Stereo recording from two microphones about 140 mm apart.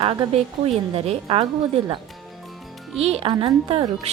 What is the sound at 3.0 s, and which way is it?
Speech, 45° right (ahead or behind).